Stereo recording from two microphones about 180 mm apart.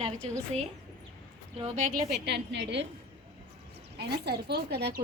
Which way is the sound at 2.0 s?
60° right (ahead or behind).